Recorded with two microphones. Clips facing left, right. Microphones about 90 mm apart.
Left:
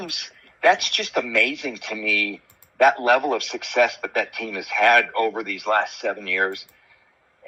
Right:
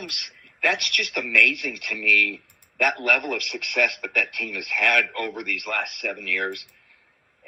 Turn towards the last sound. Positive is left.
turn(degrees=25)  # may be behind; listen again after turning